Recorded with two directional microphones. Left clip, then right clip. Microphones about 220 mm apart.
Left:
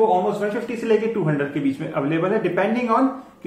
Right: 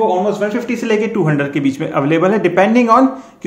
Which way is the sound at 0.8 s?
45° right (ahead or behind).